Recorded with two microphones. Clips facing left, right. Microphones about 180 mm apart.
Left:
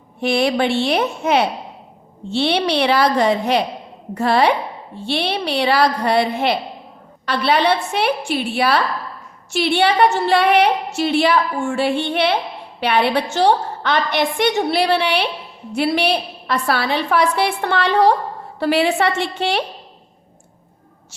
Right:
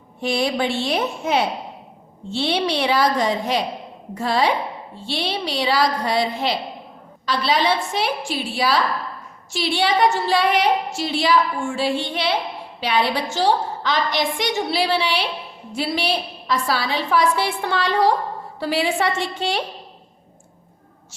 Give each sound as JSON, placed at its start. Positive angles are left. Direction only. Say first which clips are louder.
{"t": 0.2, "sound": "a woman's voice", "louder": "left 4 dB", "side_deg": 65}